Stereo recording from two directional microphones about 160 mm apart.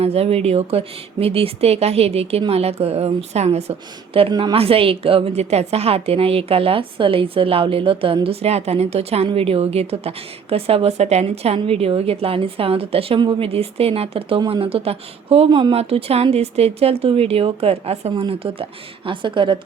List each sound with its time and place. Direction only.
0.0 s a woman's voice: 40° right (ahead or behind)